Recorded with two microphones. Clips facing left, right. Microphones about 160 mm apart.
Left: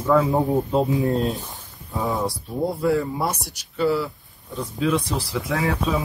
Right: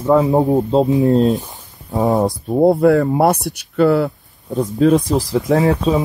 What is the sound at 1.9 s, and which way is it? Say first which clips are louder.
Speech: right 9 dB; 40° right (ahead or behind).